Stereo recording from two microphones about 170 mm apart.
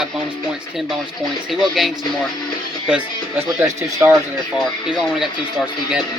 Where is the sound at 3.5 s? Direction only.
15° right (ahead or behind).